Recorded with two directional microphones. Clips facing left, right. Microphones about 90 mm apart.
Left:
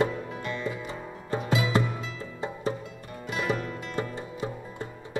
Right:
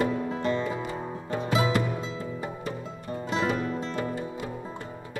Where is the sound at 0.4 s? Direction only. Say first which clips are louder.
Right 5 dB; 30° right (ahead or behind).